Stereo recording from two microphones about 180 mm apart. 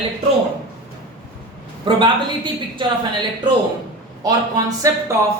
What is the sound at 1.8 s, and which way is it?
A woman's voice, 25° right (ahead or behind).